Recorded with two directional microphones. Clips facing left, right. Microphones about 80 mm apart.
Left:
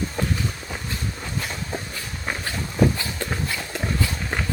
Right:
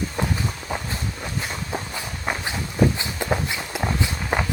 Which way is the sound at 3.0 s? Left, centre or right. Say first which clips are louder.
Right 3 dB; centre.